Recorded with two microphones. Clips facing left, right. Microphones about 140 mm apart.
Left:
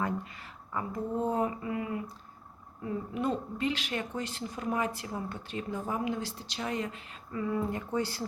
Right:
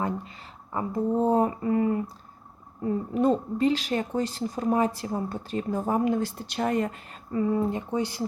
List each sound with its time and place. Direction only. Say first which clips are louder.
0.0 s speech: right 3 dB; 30° right (ahead or behind); by 7.2 s 45° right (ahead or behind)
7.3 s speech: right 7 dB; 30° right (ahead or behind)